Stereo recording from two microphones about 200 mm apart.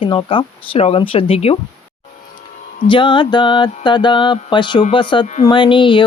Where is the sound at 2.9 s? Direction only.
25° left (ahead or behind).